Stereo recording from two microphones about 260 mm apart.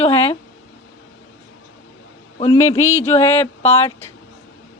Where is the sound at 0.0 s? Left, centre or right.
Centre.